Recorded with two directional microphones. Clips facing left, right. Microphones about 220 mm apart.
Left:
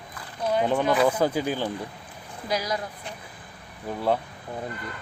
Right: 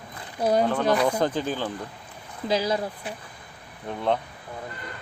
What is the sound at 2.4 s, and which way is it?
Speech, 25° right (ahead or behind).